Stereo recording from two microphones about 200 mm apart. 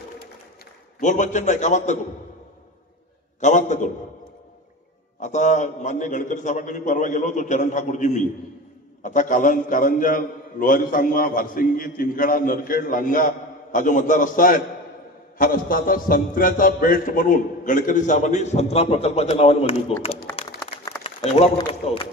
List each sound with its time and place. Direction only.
1.0 s a man's voice: 40° left (ahead or behind)
3.3 s a man's voice: 35° left (ahead or behind)
5.2 s a man's voice: 35° left (ahead or behind)
21.0 s a sound: 30° left (ahead or behind)
21.8 s a man's voice: 30° left (ahead or behind)